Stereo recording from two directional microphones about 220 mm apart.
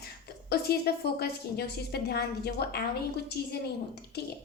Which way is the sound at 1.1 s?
45° left (ahead or behind).